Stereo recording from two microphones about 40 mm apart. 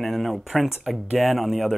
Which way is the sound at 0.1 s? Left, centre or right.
Centre.